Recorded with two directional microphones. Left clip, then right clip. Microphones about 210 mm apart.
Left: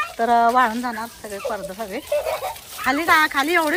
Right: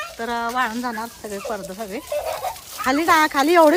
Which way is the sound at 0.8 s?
15° right (ahead or behind).